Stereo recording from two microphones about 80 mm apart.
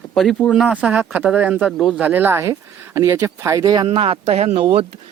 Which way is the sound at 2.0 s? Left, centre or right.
Right.